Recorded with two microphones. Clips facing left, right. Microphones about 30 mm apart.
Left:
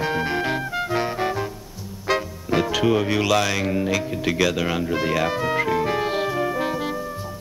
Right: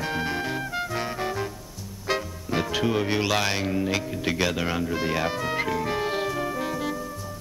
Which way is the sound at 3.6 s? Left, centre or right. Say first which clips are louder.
Left 3 dB; centre.